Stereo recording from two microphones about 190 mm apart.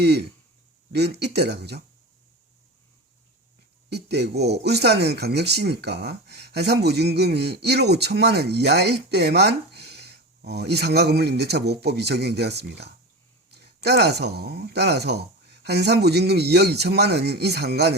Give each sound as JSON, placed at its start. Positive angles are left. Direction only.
{"t": 0.0, "sound": "speech", "side_deg": -60}
{"t": 3.9, "sound": "speech", "side_deg": -60}